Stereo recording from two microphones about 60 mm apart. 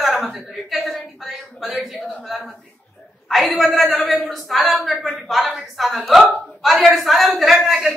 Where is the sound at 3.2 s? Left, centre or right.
Centre.